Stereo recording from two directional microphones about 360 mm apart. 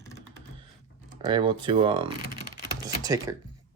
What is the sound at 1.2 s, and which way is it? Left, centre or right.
Speech, centre.